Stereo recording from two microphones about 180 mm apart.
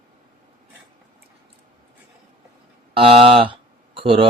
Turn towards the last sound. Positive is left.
turn(degrees=-30)  # may be behind; listen again after turning